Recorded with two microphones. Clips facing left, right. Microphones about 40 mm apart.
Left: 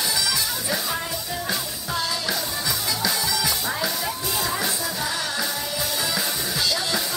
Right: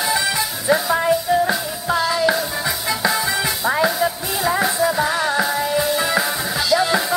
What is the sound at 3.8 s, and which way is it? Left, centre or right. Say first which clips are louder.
Music: right 7 dB; centre.